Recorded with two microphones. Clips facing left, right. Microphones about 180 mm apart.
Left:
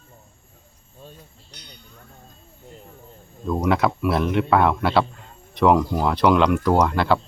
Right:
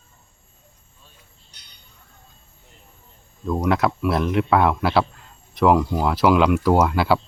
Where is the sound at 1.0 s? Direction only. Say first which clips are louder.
Left 15 dB; 55° left (ahead or behind).